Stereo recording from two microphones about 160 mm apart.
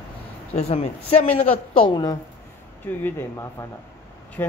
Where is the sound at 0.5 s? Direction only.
40° left (ahead or behind).